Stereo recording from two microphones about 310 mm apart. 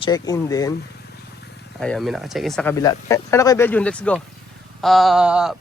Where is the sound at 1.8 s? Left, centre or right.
Centre.